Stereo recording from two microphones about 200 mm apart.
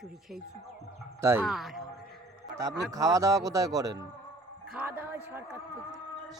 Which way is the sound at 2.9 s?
15° right (ahead or behind).